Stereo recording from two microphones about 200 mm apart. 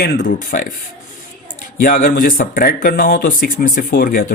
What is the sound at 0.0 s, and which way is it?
Speech, 45° left (ahead or behind).